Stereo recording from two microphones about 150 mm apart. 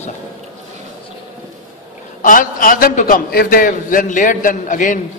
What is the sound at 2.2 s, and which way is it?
A man's voice, 65° left (ahead or behind).